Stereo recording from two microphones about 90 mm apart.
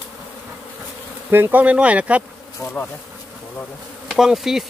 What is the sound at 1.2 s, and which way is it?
Speech, 25° right (ahead or behind).